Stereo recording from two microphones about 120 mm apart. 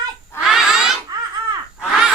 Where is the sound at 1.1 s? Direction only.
35° right (ahead or behind).